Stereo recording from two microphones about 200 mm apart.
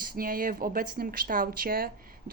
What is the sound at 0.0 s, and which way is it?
Speech, 45° right (ahead or behind).